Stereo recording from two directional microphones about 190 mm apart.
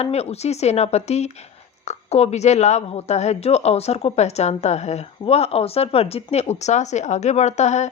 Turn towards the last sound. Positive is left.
turn(degrees=35)  # may be behind; listen again after turning